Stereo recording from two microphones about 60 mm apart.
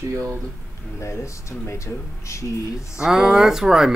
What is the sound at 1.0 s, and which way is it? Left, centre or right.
Speech, left.